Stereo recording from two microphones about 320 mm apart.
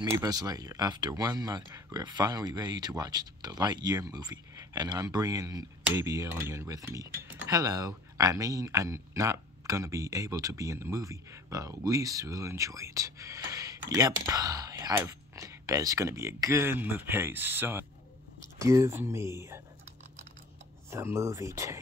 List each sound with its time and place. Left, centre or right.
0.0 s speech: centre
20.9 s speech: centre